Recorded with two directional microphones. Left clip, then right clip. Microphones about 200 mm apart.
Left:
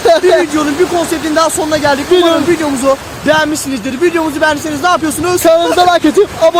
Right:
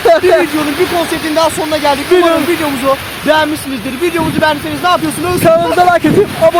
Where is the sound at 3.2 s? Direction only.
10° left (ahead or behind).